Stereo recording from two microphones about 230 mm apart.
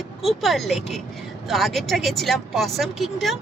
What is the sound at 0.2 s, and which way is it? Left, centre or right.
Speech, centre.